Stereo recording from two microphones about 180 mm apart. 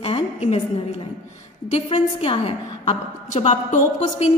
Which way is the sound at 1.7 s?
35° left (ahead or behind).